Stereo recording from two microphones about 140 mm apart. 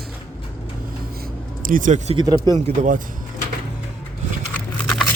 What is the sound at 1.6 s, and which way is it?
Speech, 75° right (ahead or behind).